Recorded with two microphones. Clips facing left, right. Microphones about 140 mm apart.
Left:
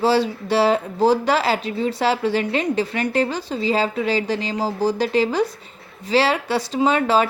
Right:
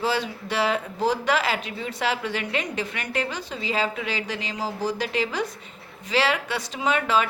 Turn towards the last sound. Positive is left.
turn(degrees=35)  # may be behind; listen again after turning